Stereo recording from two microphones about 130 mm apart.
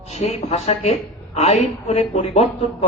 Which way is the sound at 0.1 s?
60° left (ahead or behind).